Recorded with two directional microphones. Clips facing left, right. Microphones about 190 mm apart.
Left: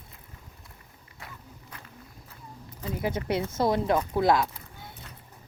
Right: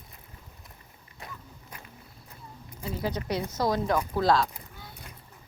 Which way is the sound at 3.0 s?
25° left (ahead or behind).